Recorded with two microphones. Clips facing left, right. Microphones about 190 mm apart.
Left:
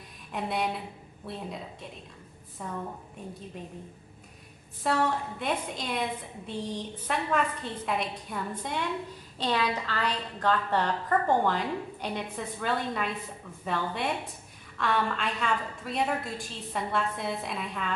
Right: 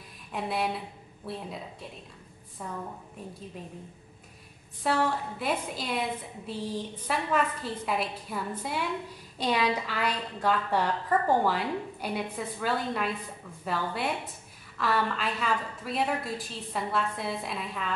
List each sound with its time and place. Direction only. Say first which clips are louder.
0.3 s a woman's voice: even; centre (ahead or behind)
4.8 s a woman's voice: even; centre (ahead or behind)